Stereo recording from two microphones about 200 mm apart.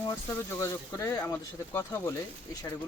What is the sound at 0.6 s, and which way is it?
Speech, 15° left (ahead or behind).